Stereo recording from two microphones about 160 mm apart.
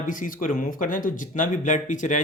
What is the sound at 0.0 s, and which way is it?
Speech, 55° left (ahead or behind).